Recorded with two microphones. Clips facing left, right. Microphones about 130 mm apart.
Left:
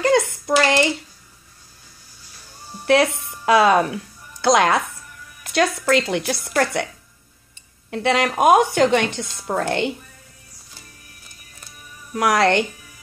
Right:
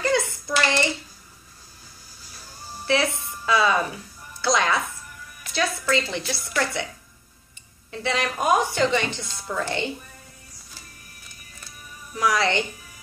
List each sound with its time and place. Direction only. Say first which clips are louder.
0.3 s a sound: left 6 dB; 65° left (ahead or behind)
2.8 s speech: left 6 dB; 65° left (ahead or behind)
3.1 s music: even; 15° left (ahead or behind)
3.4 s speech: left 6 dB; 60° left (ahead or behind)
7.9 s speech: left 7 dB; 65° left (ahead or behind)
12.1 s speech: left 5 dB; 65° left (ahead or behind)